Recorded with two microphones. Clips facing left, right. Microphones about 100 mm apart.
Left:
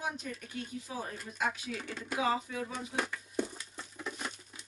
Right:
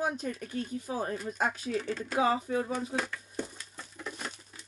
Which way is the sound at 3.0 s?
15° left (ahead or behind).